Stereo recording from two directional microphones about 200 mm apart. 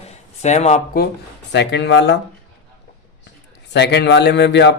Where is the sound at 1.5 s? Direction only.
60° left (ahead or behind).